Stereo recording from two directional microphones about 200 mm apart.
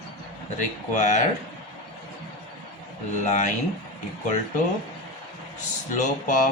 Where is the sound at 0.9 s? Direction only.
35° left (ahead or behind).